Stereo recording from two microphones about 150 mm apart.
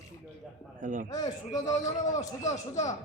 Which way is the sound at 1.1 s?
25° left (ahead or behind).